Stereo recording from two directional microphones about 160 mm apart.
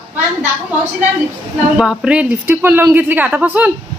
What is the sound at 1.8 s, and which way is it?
Speech, 5° right (ahead or behind).